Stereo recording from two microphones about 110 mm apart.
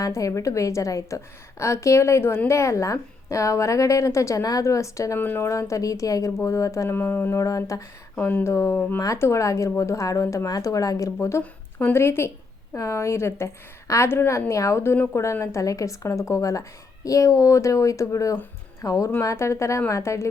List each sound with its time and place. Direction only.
0.0 s a woman's voice: 30° left (ahead or behind)
8.1 s a woman's voice: 15° left (ahead or behind)